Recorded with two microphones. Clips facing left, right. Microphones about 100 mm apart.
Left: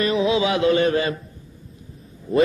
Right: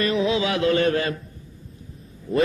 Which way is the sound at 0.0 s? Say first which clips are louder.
Left 2 dB; 15° left (ahead or behind).